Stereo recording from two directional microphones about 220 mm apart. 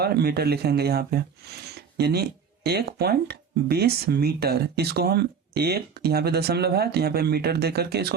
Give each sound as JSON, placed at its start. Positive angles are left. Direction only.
{"t": 0.0, "sound": "speech", "side_deg": -45}